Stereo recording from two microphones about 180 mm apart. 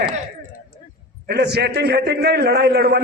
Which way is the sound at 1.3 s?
65° right (ahead or behind).